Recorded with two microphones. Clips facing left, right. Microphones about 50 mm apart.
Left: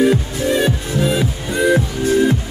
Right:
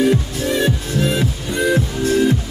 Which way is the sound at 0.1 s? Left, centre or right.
Centre.